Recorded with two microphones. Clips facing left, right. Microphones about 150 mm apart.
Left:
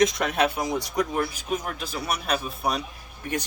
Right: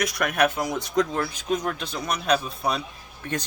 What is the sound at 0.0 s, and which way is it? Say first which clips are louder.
Speech: left 1 dB; 25° left (ahead or behind).